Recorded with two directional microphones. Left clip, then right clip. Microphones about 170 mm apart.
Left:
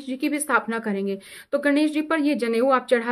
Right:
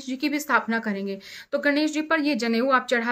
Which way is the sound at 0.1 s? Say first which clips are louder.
Left 1 dB; 55° left (ahead or behind).